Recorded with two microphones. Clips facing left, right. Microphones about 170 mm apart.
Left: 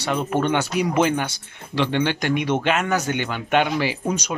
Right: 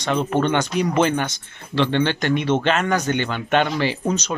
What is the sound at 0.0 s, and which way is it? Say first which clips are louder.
Speech: right 2 dB; 10° left (ahead or behind).